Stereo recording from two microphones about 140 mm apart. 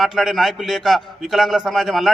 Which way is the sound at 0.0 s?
Centre (ahead or behind).